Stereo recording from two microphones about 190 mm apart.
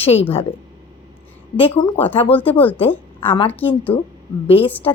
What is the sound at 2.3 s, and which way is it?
Speech, 10° left (ahead or behind).